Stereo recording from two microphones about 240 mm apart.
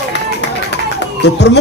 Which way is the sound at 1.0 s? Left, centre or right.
Left.